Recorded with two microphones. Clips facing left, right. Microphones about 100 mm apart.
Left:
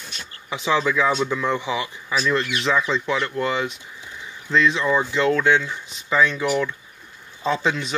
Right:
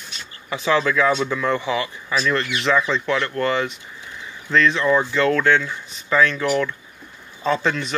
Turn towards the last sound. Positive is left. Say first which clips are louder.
# right 1 dB
turn(degrees=5)  # may be behind; listen again after turning